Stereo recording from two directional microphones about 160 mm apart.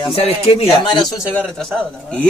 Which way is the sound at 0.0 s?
35° left (ahead or behind).